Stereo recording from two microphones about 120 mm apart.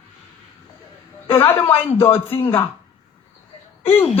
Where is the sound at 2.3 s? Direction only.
50° left (ahead or behind).